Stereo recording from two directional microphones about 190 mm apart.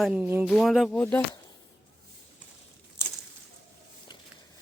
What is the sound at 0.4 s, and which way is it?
Speech, centre (ahead or behind).